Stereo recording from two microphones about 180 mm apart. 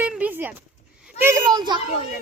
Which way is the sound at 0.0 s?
10° right (ahead or behind).